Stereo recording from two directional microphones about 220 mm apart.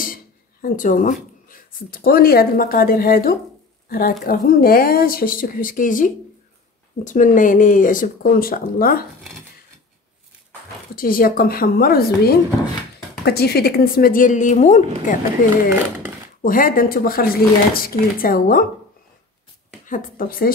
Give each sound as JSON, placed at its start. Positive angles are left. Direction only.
{"t": 0.0, "sound": "speech", "side_deg": 40}
{"t": 11.0, "sound": "speech", "side_deg": 40}
{"t": 19.9, "sound": "speech", "side_deg": 40}